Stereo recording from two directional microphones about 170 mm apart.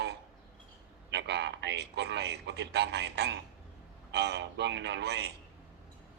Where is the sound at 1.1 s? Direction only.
80° right.